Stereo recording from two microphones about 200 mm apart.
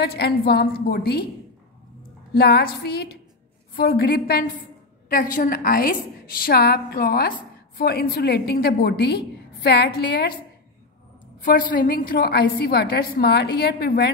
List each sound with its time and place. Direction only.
0.0 s a woman's voice: 55° left (ahead or behind)
2.3 s a woman's voice: 50° left (ahead or behind)
11.4 s a woman's voice: 45° left (ahead or behind)